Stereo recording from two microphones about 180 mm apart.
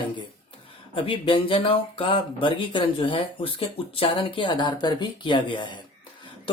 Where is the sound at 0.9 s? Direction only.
30° left (ahead or behind).